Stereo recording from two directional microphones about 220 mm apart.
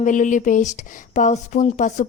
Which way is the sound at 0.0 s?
35° left (ahead or behind).